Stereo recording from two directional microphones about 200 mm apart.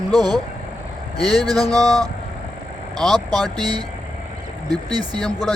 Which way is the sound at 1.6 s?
20° right (ahead or behind).